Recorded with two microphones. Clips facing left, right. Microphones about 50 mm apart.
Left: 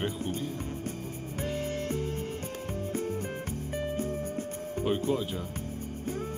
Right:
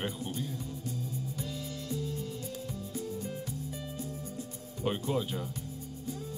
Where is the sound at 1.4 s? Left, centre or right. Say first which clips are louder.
Left 7 dB; left.